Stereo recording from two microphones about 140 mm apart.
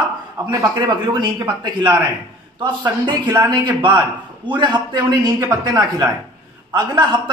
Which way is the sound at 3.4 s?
30° right (ahead or behind).